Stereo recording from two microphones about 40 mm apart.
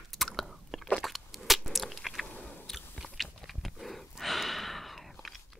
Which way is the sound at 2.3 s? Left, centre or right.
Left.